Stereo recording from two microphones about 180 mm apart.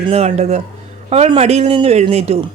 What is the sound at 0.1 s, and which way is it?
Speech, 35° right (ahead or behind).